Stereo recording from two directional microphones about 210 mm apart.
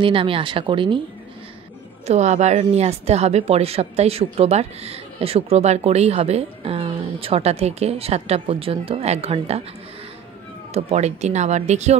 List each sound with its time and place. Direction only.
0.0 s a woman's voice: 25° right (ahead or behind)
2.0 s a woman's voice: 35° right (ahead or behind)
10.7 s speech: 30° right (ahead or behind)